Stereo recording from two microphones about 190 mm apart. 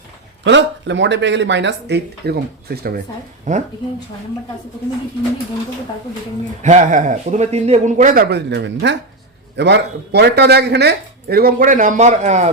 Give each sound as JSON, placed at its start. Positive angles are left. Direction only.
{"t": 0.4, "sound": "speech", "side_deg": -70}
{"t": 3.5, "sound": "speech", "side_deg": -40}
{"t": 6.6, "sound": "speech", "side_deg": -40}